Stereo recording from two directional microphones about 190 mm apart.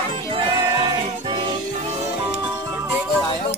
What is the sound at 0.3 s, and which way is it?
Music, 25° right (ahead or behind).